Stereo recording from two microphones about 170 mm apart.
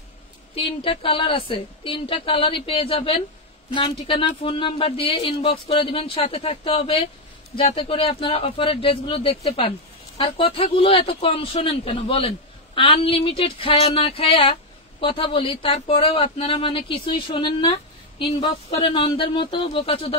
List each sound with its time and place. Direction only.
0.6 s speech: 35° left (ahead or behind)